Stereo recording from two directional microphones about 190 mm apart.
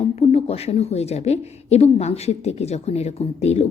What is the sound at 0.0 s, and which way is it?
A woman's voice, 30° left (ahead or behind).